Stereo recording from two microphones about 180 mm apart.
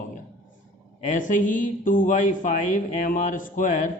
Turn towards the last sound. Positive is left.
turn(degrees=45)  # may be behind; listen again after turning